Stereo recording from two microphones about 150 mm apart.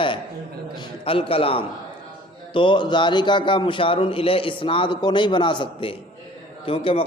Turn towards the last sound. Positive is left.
turn(degrees=40)  # may be behind; listen again after turning